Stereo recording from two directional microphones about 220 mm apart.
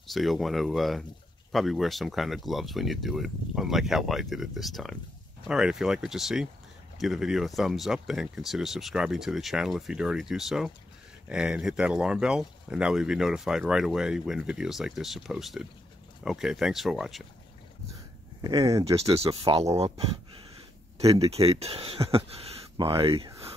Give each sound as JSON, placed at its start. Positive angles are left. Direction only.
{"t": 0.0, "sound": "speech", "side_deg": 0}
{"t": 18.4, "sound": "speech", "side_deg": -15}
{"t": 19.0, "sound": "speech", "side_deg": -25}
{"t": 21.0, "sound": "speech", "side_deg": -25}